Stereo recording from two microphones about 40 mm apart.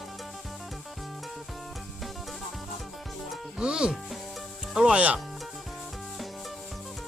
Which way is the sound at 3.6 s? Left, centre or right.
Right.